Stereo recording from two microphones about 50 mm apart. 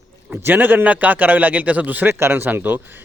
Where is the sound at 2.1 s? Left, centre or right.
Right.